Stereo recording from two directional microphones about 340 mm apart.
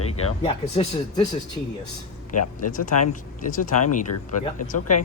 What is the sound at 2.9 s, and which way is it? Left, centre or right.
Speech, left.